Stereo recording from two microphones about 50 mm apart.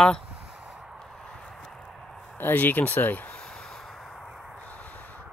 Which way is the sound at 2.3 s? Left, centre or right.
Left.